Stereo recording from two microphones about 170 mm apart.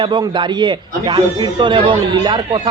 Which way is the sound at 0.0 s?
30° right (ahead or behind).